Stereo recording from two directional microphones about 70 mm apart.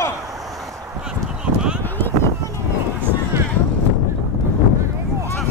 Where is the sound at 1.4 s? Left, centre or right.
Centre.